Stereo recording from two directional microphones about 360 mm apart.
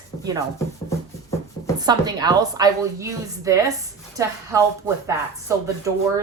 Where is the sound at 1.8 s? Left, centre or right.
Centre.